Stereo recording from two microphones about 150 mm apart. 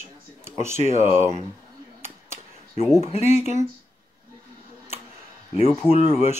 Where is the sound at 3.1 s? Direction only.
50° left (ahead or behind).